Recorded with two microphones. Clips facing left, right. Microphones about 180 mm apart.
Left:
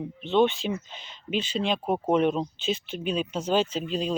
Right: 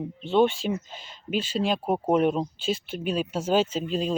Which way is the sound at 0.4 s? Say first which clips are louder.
Right 1 dB; 45° right (ahead or behind).